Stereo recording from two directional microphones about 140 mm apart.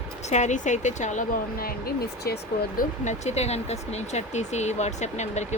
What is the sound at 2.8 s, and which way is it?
Speech, 55° left (ahead or behind).